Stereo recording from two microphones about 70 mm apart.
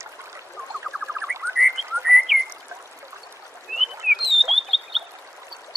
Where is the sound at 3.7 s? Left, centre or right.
Centre.